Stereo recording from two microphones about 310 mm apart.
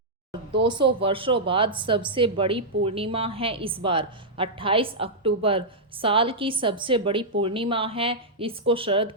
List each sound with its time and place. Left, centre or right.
0.6 s a woman's voice: centre